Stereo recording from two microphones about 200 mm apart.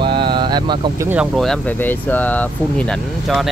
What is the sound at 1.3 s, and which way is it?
Speech, 5° left (ahead or behind).